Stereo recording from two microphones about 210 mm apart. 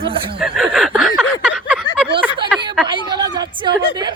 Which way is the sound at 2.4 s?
5° right (ahead or behind).